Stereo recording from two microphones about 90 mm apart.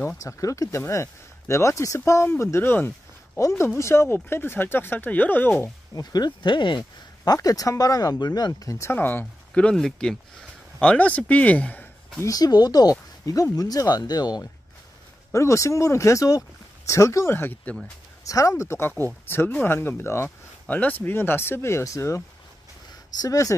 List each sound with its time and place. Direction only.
0.2 s speech: 35° left (ahead or behind); by 5.5 s 20° left (ahead or behind)
5.9 s speech: 50° left (ahead or behind)
7.3 s speech: 40° left (ahead or behind); by 9.2 s 25° left (ahead or behind)
9.2 s speech: 10° left (ahead or behind)
12.2 s speech: 45° left (ahead or behind)
15.3 s speech: 35° left (ahead or behind)
18.2 s speech: 40° left (ahead or behind)
23.2 s speech: 40° left (ahead or behind)